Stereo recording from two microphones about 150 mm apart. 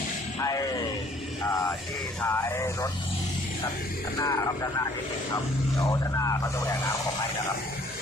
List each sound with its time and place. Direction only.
0.4 s music: 25° left (ahead or behind)
2.2 s speech: 15° left (ahead or behind)
4.2 s speech: 25° left (ahead or behind)
5.9 s speech: 20° left (ahead or behind)